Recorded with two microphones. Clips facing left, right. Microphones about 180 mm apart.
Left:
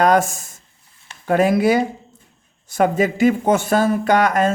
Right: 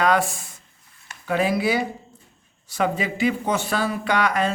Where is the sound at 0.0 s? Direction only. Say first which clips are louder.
Left 5 dB; 45° left (ahead or behind).